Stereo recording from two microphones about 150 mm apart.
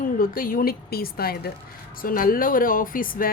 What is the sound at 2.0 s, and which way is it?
A woman's voice, 70° left (ahead or behind).